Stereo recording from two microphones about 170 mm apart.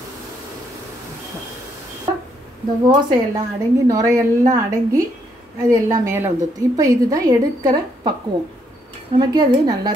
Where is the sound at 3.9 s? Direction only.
20° right (ahead or behind).